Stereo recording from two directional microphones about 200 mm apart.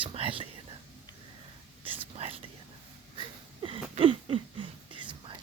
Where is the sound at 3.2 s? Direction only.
25° right (ahead or behind).